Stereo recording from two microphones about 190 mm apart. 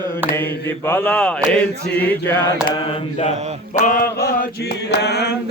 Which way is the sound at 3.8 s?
45° left (ahead or behind).